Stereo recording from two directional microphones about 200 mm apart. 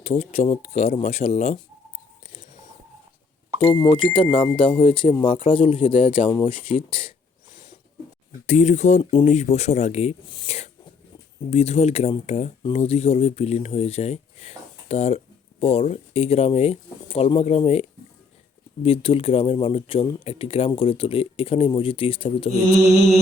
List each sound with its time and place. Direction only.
0.0 s speech: 30° left (ahead or behind)
3.7 s speech: 25° left (ahead or behind)
8.4 s speech: 35° left (ahead or behind)